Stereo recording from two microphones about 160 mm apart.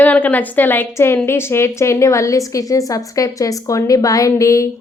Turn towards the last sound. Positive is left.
turn(degrees=20)  # may be behind; listen again after turning